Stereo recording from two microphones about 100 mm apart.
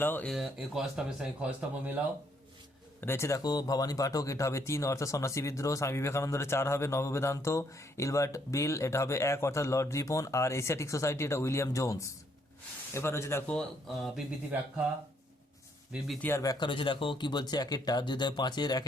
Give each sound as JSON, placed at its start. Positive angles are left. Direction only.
{"t": 0.0, "sound": "speech", "side_deg": 20}
{"t": 0.3, "sound": "speech", "side_deg": -5}
{"t": 3.0, "sound": "speech", "side_deg": 25}
{"t": 13.5, "sound": "speech", "side_deg": 5}
{"t": 16.4, "sound": "speech", "side_deg": 35}
{"t": 16.6, "sound": "speech", "side_deg": 55}